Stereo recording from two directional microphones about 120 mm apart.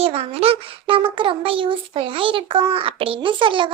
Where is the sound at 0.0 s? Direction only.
55° right (ahead or behind).